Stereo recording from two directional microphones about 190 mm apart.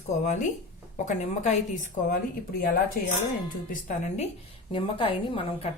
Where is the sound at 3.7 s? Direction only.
35° left (ahead or behind).